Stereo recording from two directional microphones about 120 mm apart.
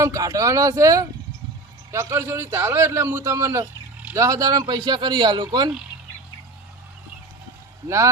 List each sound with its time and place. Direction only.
0.0 s a man's voice: 30° right (ahead or behind)
7.9 s a man's voice: 25° right (ahead or behind)